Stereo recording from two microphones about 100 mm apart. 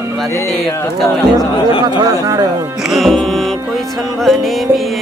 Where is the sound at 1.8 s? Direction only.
40° right (ahead or behind).